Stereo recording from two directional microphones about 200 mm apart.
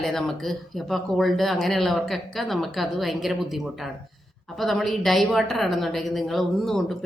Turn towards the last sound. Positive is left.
turn(degrees=0)  # may be behind; listen again after turning